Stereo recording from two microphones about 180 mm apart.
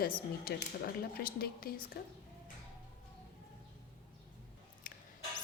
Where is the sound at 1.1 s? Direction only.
55° left (ahead or behind).